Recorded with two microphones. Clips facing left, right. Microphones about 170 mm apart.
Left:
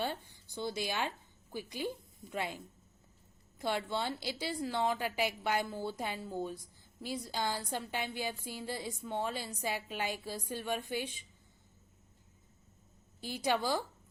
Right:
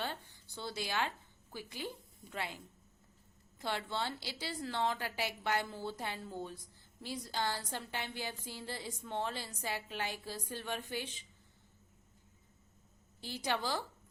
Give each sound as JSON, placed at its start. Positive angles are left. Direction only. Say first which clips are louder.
{"t": 0.0, "sound": "a woman's voice", "louder": "left 4 dB", "side_deg": 15}
{"t": 3.6, "sound": "a woman's voice", "louder": "left 3 dB", "side_deg": 15}
{"t": 13.2, "sound": "a woman's voice", "louder": "left 4 dB", "side_deg": 15}